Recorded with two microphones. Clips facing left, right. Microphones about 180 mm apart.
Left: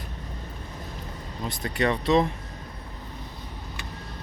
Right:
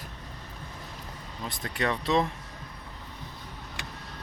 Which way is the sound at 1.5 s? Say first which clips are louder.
Left 5 dB; centre (ahead or behind).